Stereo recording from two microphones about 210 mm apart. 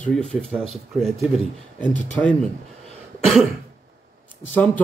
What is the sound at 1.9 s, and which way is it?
Speech, 35° left (ahead or behind).